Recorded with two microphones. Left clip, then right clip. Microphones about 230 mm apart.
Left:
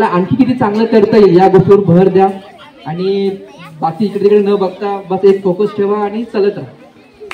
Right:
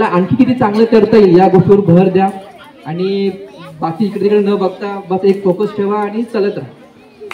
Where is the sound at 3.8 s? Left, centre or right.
Left.